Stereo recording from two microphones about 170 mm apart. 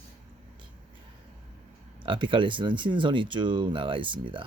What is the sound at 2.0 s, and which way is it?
Speech, 30° right (ahead or behind).